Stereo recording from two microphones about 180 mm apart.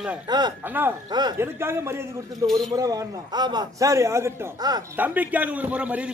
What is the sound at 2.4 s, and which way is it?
Speech, centre (ahead or behind).